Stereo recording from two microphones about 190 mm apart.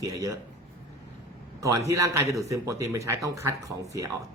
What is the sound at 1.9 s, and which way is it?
Speech, 15° right (ahead or behind).